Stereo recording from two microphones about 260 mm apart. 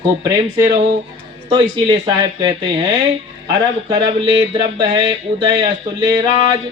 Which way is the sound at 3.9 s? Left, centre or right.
Centre.